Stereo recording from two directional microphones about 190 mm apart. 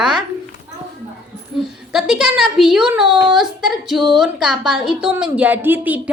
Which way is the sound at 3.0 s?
25° right (ahead or behind).